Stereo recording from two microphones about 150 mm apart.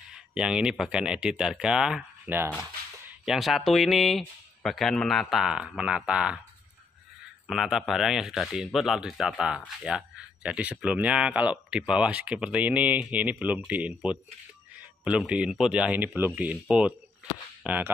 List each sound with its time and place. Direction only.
0.1 s speech: 5° right (ahead or behind)
3.3 s speech: centre (ahead or behind)
7.4 s speech: centre (ahead or behind)